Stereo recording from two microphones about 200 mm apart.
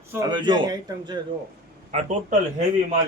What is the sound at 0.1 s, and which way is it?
Speech, 20° right (ahead or behind).